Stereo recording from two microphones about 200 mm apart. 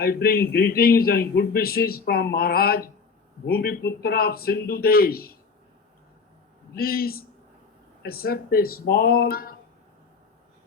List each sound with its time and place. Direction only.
0.0 s a man's voice: 50° left (ahead or behind)
6.7 s a man's voice: 50° left (ahead or behind)